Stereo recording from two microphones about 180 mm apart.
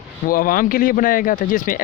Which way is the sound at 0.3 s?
50° left (ahead or behind).